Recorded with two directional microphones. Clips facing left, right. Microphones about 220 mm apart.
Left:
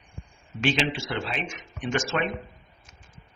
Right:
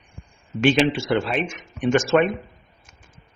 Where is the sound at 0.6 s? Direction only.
55° right (ahead or behind).